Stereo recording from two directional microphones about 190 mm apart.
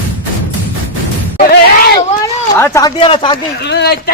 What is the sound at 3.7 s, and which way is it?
Speech, 60° left (ahead or behind).